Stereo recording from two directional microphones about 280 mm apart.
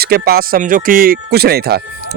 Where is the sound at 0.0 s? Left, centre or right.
Right.